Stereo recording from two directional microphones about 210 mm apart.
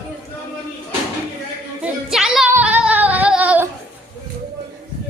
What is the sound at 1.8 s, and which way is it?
Singing, centre (ahead or behind).